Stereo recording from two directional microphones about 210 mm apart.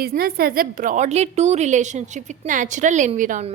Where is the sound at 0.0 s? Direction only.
45° right (ahead or behind).